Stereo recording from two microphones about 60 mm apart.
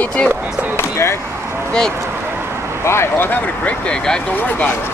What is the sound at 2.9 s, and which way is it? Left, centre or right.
Speech, left.